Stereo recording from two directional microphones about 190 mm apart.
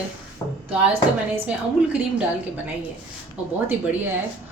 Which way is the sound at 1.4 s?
5° right (ahead or behind).